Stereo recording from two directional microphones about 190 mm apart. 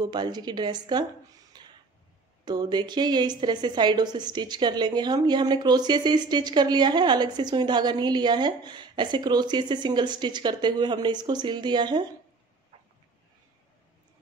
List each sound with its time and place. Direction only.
0.0 s a woman's voice: 20° right (ahead or behind)
1.5 s a sound: 20° right (ahead or behind)
2.4 s a woman's voice: 20° right (ahead or behind)